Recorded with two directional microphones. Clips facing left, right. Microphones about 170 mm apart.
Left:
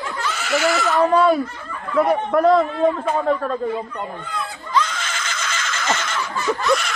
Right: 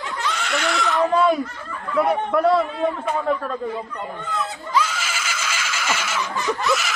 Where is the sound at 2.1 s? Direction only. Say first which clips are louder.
Left 3 dB; 45° left (ahead or behind).